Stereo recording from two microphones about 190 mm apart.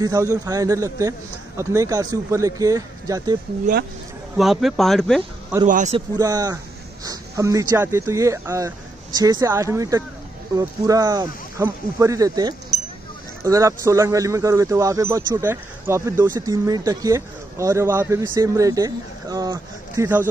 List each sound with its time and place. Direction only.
0.0 s speech: 15° right (ahead or behind)
4.4 s speech: centre (ahead or behind)
5.7 s speech: 40° right (ahead or behind)
5.9 s speech: 20° right (ahead or behind)